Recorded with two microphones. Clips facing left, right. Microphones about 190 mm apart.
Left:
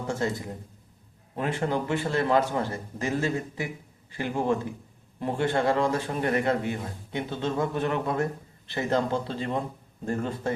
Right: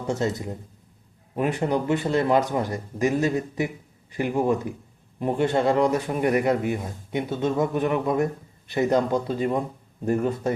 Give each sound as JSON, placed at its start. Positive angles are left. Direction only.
{"t": 0.1, "sound": "a man's voice", "side_deg": -20}